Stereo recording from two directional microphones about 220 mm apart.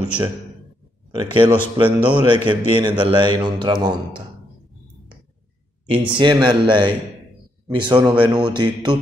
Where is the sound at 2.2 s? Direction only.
20° right (ahead or behind).